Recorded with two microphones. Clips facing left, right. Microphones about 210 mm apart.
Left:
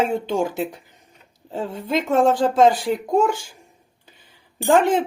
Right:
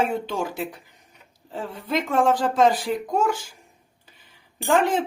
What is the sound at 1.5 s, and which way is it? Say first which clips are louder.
Speech: left 3 dB; 25° left (ahead or behind).